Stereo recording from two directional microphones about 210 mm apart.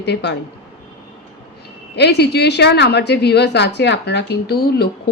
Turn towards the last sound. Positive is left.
turn(degrees=50)  # may be behind; listen again after turning